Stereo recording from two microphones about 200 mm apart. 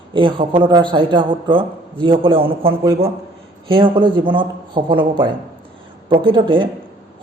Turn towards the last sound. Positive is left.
turn(degrees=-25)  # may be behind; listen again after turning